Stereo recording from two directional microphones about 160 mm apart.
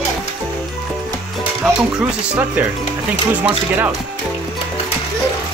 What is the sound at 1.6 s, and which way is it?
Music, 5° right (ahead or behind).